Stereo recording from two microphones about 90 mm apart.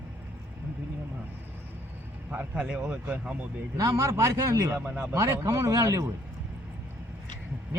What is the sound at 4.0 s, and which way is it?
Speech, 35° right (ahead or behind).